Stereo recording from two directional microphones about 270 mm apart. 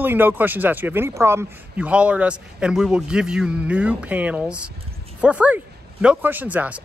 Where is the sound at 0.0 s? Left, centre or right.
Centre.